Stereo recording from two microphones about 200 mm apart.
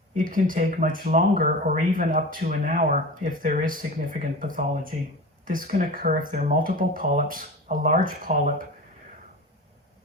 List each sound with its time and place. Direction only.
0.2 s speech: 40° right (ahead or behind)